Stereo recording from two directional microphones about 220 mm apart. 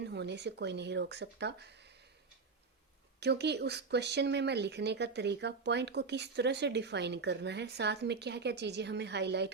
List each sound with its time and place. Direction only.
0.0 s speech: 50° right (ahead or behind)
3.2 s speech: 50° right (ahead or behind)